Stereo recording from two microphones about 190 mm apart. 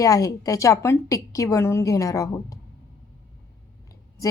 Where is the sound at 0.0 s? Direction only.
20° left (ahead or behind).